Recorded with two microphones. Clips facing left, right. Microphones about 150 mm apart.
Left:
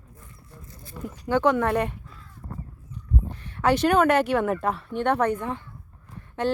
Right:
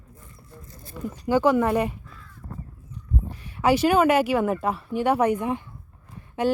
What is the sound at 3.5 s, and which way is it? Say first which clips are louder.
A woman's voice: right 1 dB; 10° right (ahead or behind).